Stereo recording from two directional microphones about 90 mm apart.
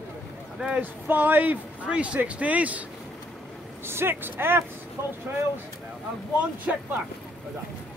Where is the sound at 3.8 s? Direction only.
25° right (ahead or behind).